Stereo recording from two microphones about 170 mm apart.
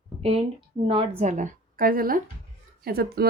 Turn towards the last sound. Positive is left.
turn(degrees=-65)  # may be behind; listen again after turning